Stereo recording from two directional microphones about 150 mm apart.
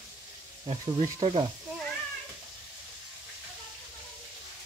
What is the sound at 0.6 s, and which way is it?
Speech, 40° right (ahead or behind).